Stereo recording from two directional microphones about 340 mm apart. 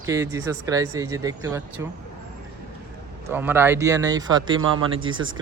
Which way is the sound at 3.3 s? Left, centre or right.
Centre.